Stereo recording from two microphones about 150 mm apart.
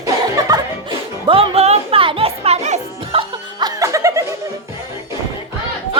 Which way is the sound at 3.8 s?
20° right (ahead or behind).